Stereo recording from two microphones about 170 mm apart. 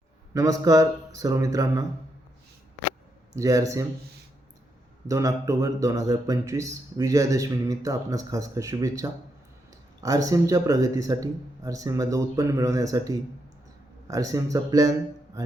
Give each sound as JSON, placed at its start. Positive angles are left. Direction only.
{"t": 0.3, "sound": "speech", "side_deg": -20}
{"t": 3.3, "sound": "speech", "side_deg": -20}
{"t": 5.0, "sound": "speech", "side_deg": -20}